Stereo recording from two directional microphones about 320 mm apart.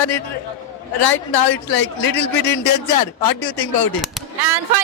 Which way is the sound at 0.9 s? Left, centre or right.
Left.